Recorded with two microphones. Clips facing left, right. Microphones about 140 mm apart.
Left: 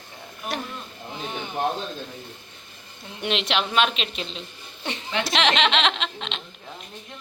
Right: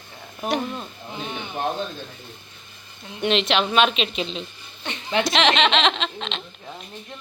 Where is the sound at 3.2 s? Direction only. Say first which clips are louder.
Right 4 dB; 10° left (ahead or behind).